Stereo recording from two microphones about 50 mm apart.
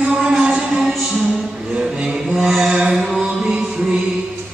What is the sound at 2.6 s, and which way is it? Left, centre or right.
Music, centre.